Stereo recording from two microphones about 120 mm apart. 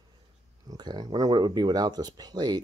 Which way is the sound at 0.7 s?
35° right (ahead or behind).